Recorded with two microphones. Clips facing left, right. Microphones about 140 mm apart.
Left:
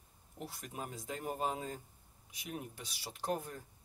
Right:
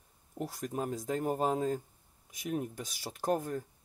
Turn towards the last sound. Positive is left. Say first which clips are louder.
# right 7 dB
turn(degrees=-45)  # may be behind; listen again after turning